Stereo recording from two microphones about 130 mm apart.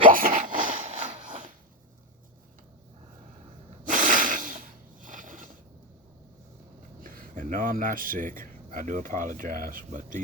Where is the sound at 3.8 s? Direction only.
90° right.